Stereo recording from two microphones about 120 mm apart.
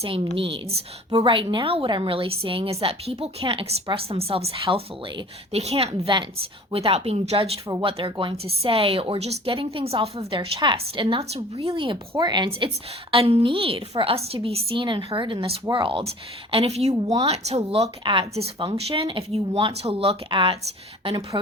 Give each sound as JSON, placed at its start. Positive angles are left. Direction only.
{"t": 0.3, "sound": "a woman's voice", "side_deg": -50}
{"t": 7.8, "sound": "a woman's voice", "side_deg": -45}
{"t": 11.8, "sound": "a woman's voice", "side_deg": -40}
{"t": 18.0, "sound": "a woman's voice", "side_deg": -40}